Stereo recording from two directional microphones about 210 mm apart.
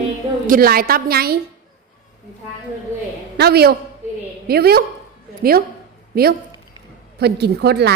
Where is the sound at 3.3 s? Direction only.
50° right (ahead or behind).